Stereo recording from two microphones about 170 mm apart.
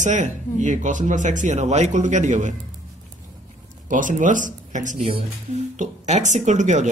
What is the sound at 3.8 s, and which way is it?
A man's voice, 50° right (ahead or behind).